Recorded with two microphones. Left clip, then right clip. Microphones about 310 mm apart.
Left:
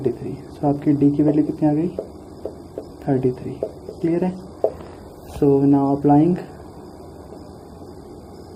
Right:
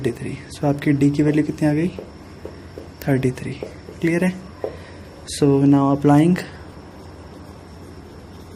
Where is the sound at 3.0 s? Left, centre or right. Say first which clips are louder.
Left 1 dB; right.